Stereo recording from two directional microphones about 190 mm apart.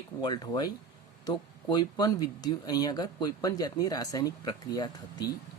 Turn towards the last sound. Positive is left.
turn(degrees=20)  # may be behind; listen again after turning